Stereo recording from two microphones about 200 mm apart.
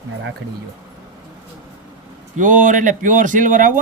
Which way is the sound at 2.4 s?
40° right (ahead or behind).